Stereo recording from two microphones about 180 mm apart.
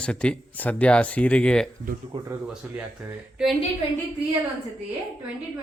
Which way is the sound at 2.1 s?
25° right (ahead or behind).